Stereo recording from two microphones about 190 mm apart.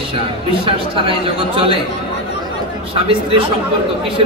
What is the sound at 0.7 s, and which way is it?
Speech, 30° right (ahead or behind).